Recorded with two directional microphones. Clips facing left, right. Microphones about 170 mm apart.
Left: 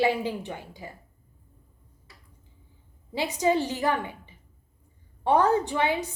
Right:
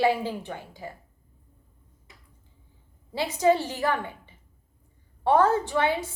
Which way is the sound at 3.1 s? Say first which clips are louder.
Right 2 dB; 15° left (ahead or behind).